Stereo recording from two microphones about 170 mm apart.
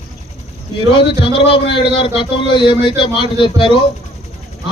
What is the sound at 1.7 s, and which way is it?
A man's voice, 30° left (ahead or behind).